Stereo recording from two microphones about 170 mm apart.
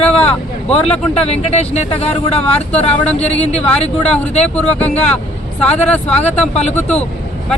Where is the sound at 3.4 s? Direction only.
40° left (ahead or behind).